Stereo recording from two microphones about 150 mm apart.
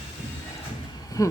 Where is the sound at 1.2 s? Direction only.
20° left (ahead or behind).